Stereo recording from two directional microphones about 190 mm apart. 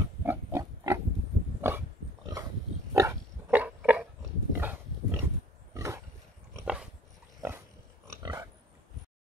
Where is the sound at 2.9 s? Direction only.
15° right (ahead or behind).